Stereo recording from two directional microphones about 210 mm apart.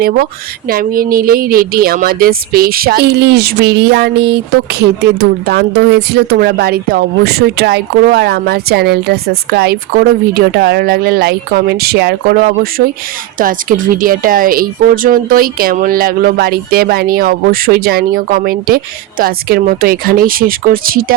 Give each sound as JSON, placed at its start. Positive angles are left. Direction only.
{"t": 0.7, "sound": "speech", "side_deg": -45}